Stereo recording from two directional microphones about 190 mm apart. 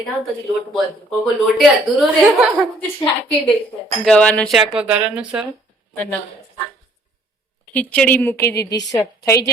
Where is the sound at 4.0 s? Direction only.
5° left (ahead or behind).